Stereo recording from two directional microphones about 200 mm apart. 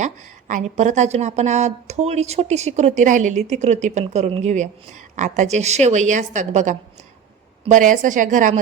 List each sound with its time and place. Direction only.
0.0 s a woman's voice: 35° right (ahead or behind)